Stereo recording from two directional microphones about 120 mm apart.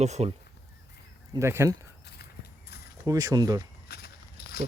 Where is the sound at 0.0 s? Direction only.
65° right (ahead or behind).